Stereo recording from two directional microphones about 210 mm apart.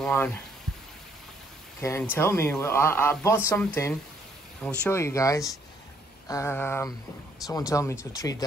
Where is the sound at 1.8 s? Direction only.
10° left (ahead or behind).